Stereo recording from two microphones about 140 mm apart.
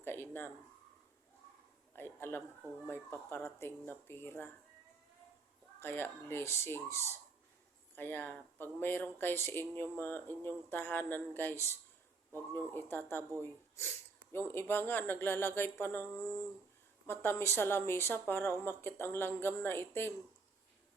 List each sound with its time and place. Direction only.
0.0 s speech: 15° left (ahead or behind)
2.0 s speech: 15° left (ahead or behind)
5.8 s speech: 15° left (ahead or behind)